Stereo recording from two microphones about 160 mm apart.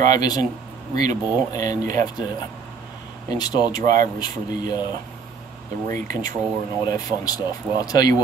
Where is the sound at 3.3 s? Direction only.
25° left (ahead or behind).